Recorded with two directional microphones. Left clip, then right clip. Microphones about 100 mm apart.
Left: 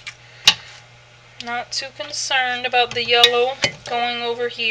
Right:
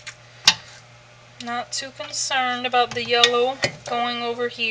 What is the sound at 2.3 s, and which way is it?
Speech, 25° left (ahead or behind).